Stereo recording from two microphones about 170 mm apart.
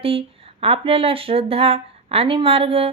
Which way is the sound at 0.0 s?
35° right (ahead or behind).